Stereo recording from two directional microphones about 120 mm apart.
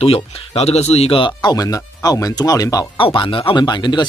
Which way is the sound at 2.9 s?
45° left (ahead or behind).